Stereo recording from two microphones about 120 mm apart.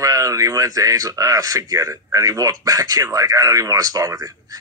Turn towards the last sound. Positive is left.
turn(degrees=-30)  # may be behind; listen again after turning